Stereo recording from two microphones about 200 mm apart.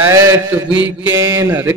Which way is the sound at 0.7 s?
20° left (ahead or behind).